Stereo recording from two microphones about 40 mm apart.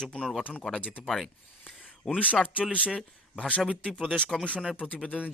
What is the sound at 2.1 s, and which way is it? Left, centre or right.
Speech, left.